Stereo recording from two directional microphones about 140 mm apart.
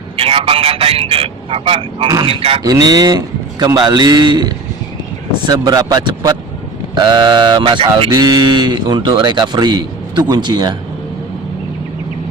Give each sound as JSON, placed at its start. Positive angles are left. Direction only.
{"t": 0.2, "sound": "speech", "side_deg": -40}
{"t": 2.6, "sound": "a man's voice", "side_deg": -25}